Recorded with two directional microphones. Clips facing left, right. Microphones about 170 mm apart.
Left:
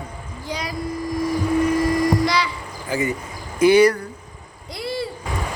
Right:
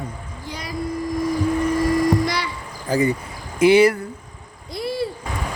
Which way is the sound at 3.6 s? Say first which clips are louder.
Even; 25° right (ahead or behind).